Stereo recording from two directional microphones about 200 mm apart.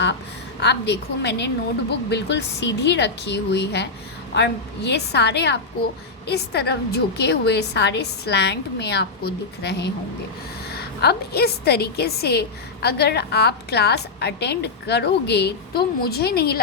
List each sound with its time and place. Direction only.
0.6 s a woman's voice: 60° left (ahead or behind)